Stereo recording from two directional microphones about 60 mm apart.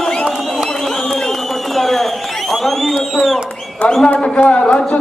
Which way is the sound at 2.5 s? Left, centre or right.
Centre.